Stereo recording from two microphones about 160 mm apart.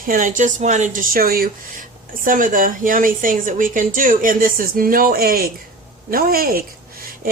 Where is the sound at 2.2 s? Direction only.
55° right (ahead or behind).